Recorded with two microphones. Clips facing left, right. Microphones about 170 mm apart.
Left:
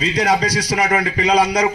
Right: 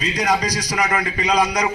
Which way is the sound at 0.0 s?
30° left (ahead or behind).